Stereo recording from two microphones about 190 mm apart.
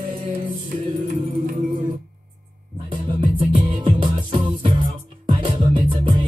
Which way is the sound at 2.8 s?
25° right (ahead or behind).